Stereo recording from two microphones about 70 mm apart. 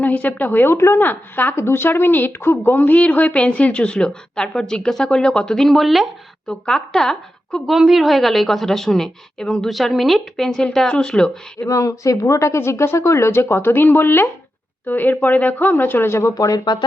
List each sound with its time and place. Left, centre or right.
0.0 s a sound: left
0.3 s a woman's voice: left; by 11.3 s centre
11.6 s speech: left
16.3 s speech: left